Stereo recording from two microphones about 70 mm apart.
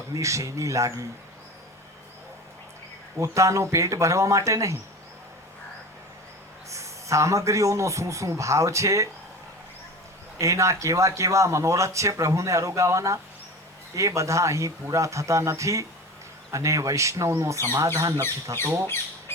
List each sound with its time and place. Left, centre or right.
0.1 s speech: right
3.2 s speech: right
6.7 s speech: right
10.3 s speech: right
18.6 s speech: right